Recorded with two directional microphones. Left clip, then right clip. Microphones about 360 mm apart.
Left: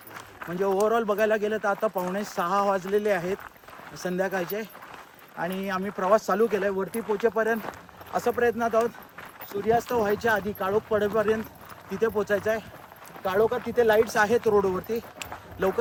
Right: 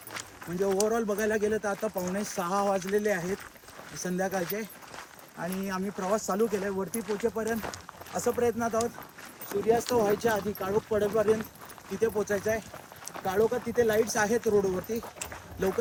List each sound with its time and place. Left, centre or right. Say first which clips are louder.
0.6 s speech: left 4 dB; centre
1.2 s speech: left 4 dB; centre
9.5 s speech: left 1 dB; centre
13.2 s a sound: left 3 dB; centre
13.7 s speech: left 6 dB; centre